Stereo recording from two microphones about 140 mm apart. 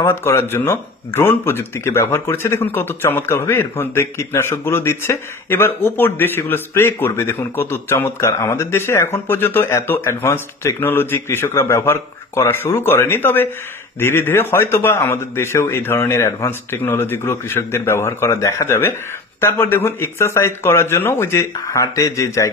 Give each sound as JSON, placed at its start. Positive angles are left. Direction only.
{"t": 0.0, "sound": "speech", "side_deg": 20}